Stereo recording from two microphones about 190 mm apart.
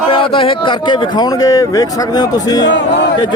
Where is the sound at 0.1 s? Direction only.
25° left (ahead or behind).